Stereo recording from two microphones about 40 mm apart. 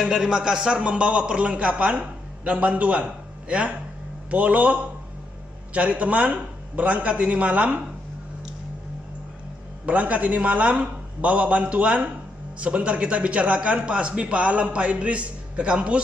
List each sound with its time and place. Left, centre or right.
0.0 s a man's voice: centre
0.3 s a man's voice: centre
0.8 s a man's voice: right
9.8 s a man's voice: right